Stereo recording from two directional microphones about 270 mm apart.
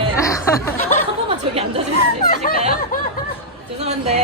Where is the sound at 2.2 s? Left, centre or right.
Left.